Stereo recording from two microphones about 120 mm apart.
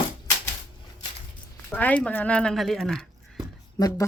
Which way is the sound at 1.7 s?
15° left (ahead or behind).